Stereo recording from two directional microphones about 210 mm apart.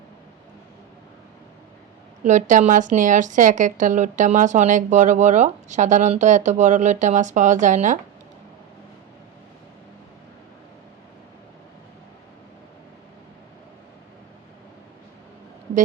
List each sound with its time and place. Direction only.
2.2 s speech: 35° right (ahead or behind)